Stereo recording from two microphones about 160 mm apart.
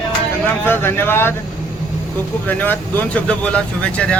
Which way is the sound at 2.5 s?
10° left (ahead or behind).